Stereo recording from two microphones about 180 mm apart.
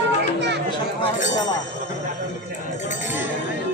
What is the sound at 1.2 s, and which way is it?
Speech, 45° left (ahead or behind).